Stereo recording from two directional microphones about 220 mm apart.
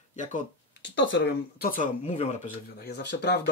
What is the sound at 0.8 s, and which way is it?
Speech, 55° left (ahead or behind).